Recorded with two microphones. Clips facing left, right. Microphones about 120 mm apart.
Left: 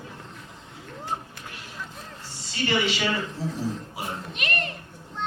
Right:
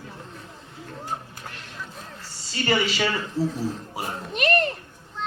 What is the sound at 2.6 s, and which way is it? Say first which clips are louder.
Speech: right 2 dB; 40° right (ahead or behind).